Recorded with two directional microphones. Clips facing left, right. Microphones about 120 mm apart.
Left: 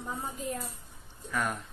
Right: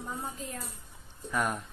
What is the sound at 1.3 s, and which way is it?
Speech, 20° right (ahead or behind).